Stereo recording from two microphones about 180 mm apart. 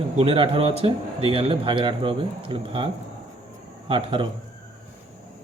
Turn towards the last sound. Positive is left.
turn(degrees=-30)  # may be behind; listen again after turning